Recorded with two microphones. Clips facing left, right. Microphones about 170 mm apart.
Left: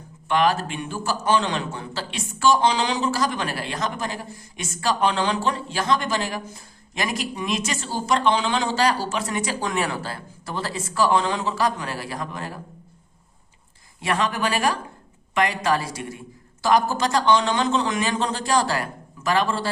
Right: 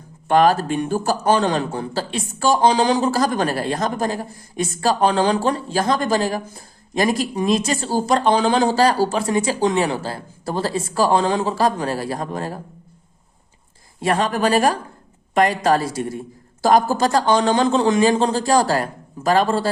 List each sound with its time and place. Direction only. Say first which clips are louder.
0.3 s a man's voice: right 6 dB; 40° right (ahead or behind)
14.0 s a man's voice: right 5 dB; 35° right (ahead or behind)
15.8 s a man's voice: right 8 dB; 30° right (ahead or behind)